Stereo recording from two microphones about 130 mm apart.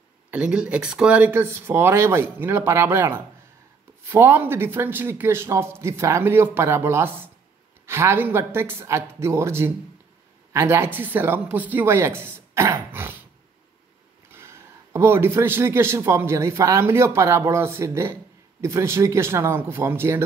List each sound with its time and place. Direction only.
0.3 s speech: 5° right (ahead or behind)
14.3 s speech: 20° right (ahead or behind)